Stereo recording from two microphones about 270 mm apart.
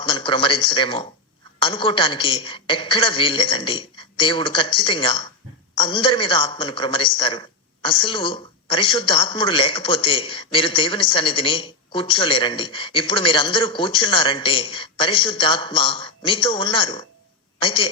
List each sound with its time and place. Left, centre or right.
0.0 s a man's voice: centre